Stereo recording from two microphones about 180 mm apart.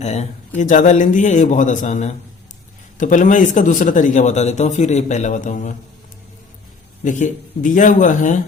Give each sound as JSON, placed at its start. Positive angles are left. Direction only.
{"t": 0.0, "sound": "speech", "side_deg": 40}
{"t": 7.0, "sound": "speech", "side_deg": 45}